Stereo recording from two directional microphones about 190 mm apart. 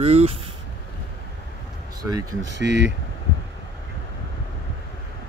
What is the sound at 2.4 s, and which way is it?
Speech, 70° right (ahead or behind).